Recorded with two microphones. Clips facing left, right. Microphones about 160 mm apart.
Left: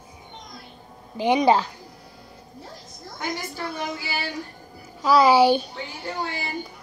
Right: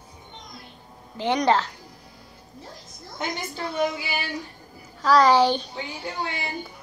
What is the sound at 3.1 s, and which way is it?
A woman's voice, 20° right (ahead or behind).